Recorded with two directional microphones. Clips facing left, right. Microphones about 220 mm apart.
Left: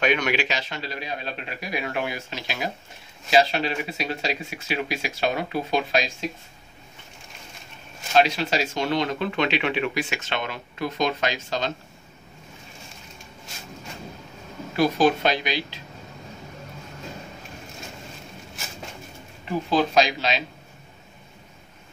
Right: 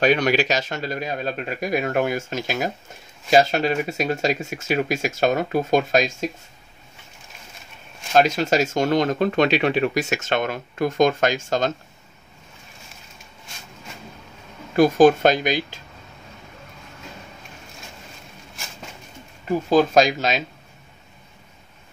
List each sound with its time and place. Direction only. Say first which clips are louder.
0.0 s speech: right 5 dB; 35° right (ahead or behind)
8.1 s speech: right 3 dB; 45° right (ahead or behind)
14.8 s speech: right 6 dB; 45° right (ahead or behind)
19.7 s speech: right 5 dB; 45° right (ahead or behind)